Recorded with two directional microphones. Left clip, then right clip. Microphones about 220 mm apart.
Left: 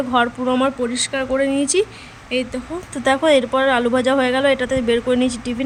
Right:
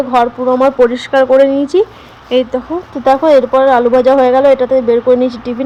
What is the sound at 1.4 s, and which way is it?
Speech, 5° right (ahead or behind).